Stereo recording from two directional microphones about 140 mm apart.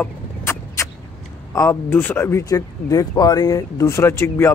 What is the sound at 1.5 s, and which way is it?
Speech, 20° left (ahead or behind).